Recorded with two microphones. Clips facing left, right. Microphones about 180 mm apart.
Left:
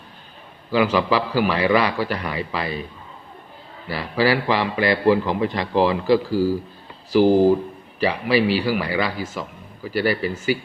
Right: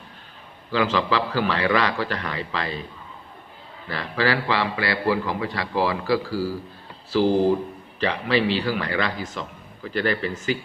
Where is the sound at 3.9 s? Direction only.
10° left (ahead or behind).